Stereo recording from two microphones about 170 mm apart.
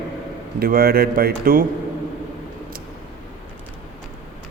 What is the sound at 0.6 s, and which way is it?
A man's voice, 65° right (ahead or behind).